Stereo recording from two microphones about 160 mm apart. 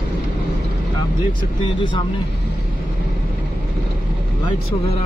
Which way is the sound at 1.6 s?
30° left (ahead or behind).